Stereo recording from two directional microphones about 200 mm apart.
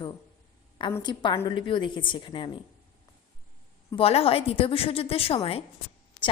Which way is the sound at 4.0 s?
30° left (ahead or behind).